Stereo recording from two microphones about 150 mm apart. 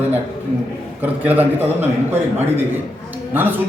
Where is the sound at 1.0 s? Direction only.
10° right (ahead or behind).